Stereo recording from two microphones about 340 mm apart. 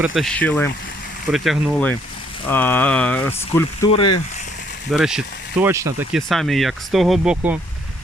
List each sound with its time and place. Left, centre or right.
0.0 s speech: centre
4.9 s speech: centre